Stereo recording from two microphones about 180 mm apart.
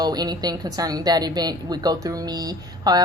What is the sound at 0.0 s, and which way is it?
A woman's voice, 20° right (ahead or behind).